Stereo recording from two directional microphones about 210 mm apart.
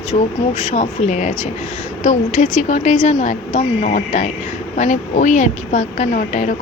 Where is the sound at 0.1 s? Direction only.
30° left (ahead or behind).